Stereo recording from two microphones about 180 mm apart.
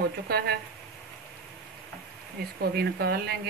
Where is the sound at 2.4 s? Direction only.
60° right (ahead or behind).